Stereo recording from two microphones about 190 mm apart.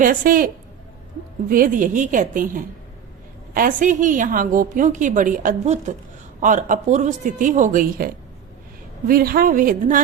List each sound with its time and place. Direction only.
0.0 s a woman's voice: 45° right (ahead or behind)